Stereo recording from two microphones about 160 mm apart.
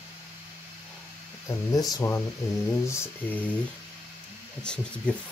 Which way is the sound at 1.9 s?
15° left (ahead or behind).